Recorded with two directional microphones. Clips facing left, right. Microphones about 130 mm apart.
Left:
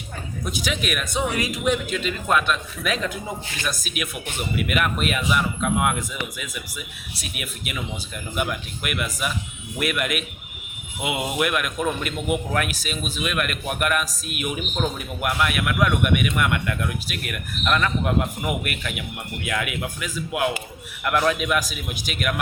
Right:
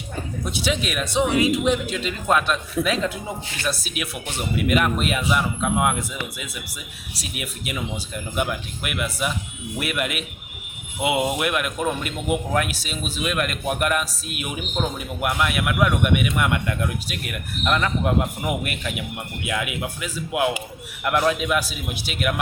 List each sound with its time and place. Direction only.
0.4 s speech: 30° right (ahead or behind)